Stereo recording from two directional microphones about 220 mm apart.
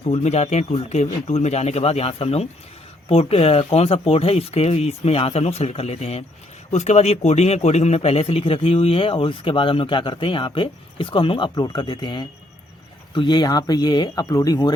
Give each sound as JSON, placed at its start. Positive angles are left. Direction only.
{"t": 0.1, "sound": "a man's voice", "side_deg": 30}